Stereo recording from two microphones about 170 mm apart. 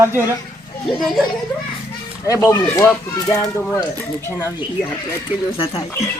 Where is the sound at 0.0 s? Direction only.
15° right (ahead or behind).